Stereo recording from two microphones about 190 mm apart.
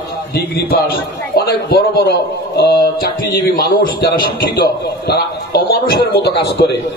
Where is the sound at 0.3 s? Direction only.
55° left (ahead or behind).